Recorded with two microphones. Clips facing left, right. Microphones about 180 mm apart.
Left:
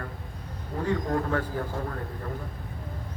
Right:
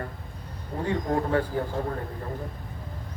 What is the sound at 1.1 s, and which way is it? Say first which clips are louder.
Speech: right 3 dB; 30° right (ahead or behind).